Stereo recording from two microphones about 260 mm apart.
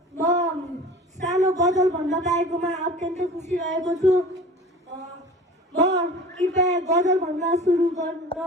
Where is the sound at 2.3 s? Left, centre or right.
Right.